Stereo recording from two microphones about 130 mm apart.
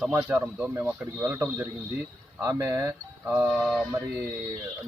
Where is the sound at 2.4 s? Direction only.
25° right (ahead or behind).